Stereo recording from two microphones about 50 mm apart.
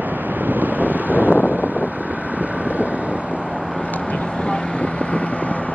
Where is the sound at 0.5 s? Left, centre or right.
Right.